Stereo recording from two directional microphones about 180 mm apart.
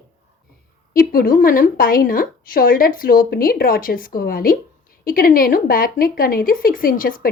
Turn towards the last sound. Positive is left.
turn(degrees=50)  # may be behind; listen again after turning